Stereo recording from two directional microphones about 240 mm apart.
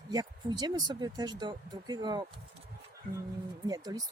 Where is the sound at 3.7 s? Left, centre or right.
Centre.